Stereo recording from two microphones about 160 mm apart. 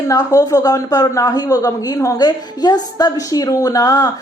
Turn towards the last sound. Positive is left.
turn(degrees=20)  # may be behind; listen again after turning